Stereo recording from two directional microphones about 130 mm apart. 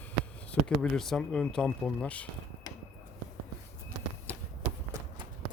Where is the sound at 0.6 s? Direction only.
5° left (ahead or behind).